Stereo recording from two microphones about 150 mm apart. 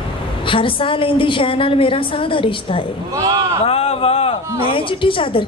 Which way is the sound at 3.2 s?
20° right (ahead or behind).